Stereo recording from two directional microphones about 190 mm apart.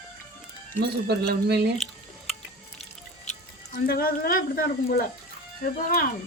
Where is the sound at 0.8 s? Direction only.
60° right (ahead or behind).